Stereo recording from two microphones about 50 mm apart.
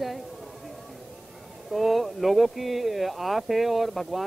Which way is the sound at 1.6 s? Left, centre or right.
Centre.